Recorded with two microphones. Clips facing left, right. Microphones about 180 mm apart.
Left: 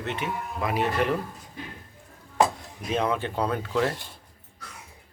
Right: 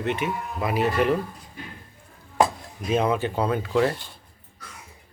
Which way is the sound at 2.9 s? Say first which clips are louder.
Right 4 dB; 5° right (ahead or behind).